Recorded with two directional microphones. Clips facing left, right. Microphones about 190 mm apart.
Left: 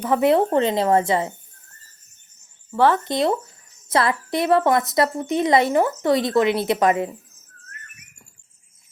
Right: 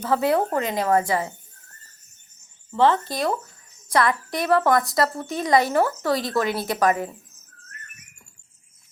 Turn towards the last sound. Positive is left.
turn(degrees=25)  # may be behind; listen again after turning